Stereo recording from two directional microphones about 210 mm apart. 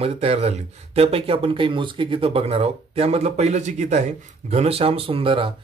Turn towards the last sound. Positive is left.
turn(degrees=-25)  # may be behind; listen again after turning